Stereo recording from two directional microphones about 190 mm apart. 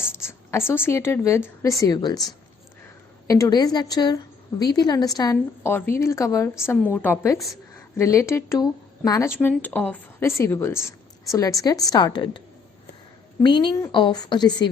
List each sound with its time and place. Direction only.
0.0 s a woman's voice: 10° left (ahead or behind)
13.4 s a woman's voice: 25° left (ahead or behind)